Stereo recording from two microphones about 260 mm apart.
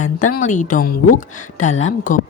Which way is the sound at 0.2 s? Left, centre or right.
Left.